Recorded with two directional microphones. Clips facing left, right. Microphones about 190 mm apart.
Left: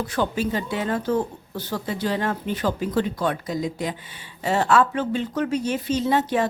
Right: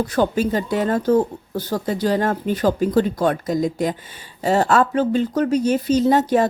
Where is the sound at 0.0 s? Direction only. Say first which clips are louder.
Right 5 dB; 40° right (ahead or behind).